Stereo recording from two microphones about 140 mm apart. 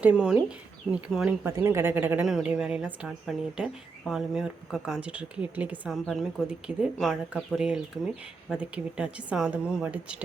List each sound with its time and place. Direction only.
0.0 s speech: 5° right (ahead or behind)
1.5 s speech: 20° right (ahead or behind)
5.9 s speech: centre (ahead or behind)